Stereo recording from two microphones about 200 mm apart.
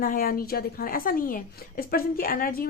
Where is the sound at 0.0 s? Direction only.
45° left (ahead or behind).